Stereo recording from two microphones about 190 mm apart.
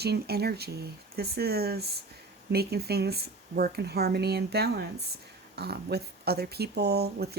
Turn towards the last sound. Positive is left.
turn(degrees=-55)  # may be behind; listen again after turning